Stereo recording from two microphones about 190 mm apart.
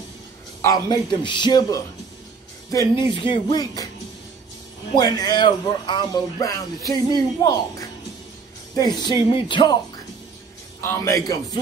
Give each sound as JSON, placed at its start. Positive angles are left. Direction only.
{"t": 0.6, "sound": "speech", "side_deg": 20}
{"t": 3.2, "sound": "speech", "side_deg": 25}
{"t": 4.9, "sound": "speech", "side_deg": 20}
{"t": 10.8, "sound": "a man's voice", "side_deg": 15}